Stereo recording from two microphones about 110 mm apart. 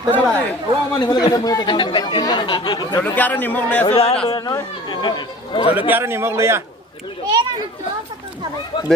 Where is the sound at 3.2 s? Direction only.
15° left (ahead or behind).